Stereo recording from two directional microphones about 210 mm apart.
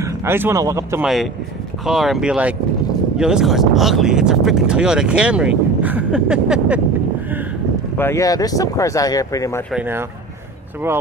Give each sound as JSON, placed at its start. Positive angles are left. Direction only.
{"t": 0.0, "sound": "speech", "side_deg": -10}
{"t": 1.0, "sound": "speech", "side_deg": 0}
{"t": 8.0, "sound": "speech", "side_deg": 15}
{"t": 9.7, "sound": "speech", "side_deg": -10}